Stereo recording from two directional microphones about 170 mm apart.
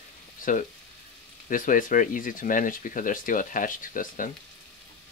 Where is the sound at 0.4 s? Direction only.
50° left (ahead or behind).